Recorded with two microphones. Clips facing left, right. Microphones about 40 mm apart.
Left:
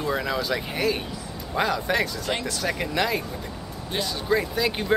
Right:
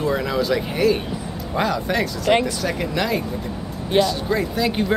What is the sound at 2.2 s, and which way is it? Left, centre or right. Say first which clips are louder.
Speech: right 10 dB; right.